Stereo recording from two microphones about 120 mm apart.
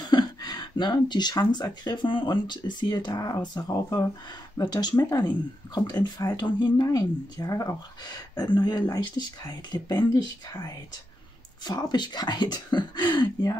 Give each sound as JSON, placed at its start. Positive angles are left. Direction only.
{"t": 0.0, "sound": "speech", "side_deg": 35}